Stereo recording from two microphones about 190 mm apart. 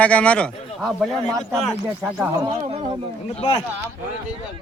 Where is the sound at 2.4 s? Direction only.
30° right (ahead or behind).